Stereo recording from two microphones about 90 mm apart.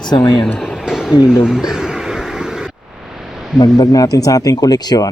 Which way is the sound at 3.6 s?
45° left (ahead or behind).